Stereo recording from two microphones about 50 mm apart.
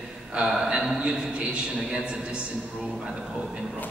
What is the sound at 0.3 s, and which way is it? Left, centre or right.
Speech, centre.